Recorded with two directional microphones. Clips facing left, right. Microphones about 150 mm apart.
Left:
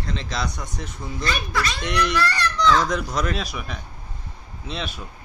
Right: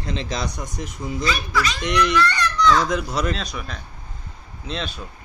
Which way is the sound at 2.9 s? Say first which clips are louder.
Right 1 dB; 5° right (ahead or behind).